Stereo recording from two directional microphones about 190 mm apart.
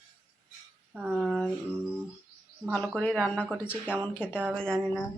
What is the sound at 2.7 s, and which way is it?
Speech, 10° left (ahead or behind).